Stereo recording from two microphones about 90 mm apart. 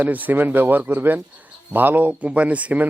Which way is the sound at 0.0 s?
20° right (ahead or behind).